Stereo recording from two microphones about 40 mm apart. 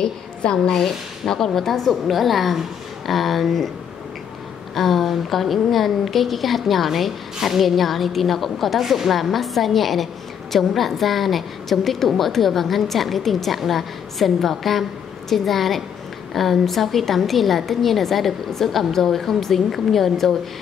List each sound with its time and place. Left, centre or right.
0.0 s a woman's voice: left
0.7 s a woman's voice: centre
4.7 s a woman's voice: centre